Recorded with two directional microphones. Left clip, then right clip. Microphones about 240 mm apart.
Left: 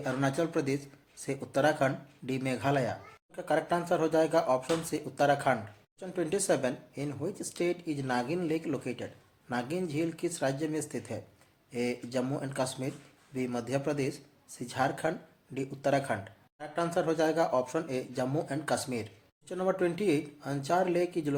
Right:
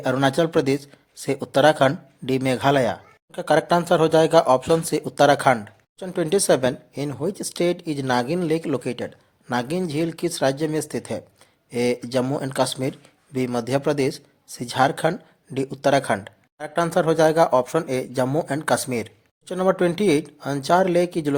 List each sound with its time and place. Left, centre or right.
0.0 s a man's voice: right